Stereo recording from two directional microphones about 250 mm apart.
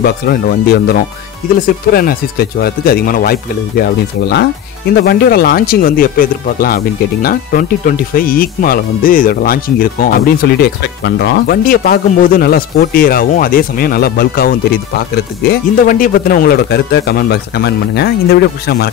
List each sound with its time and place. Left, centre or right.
0.0 s speech: left